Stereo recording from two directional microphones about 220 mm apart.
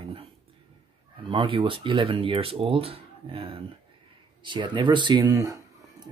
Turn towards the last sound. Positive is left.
turn(degrees=-15)  # may be behind; listen again after turning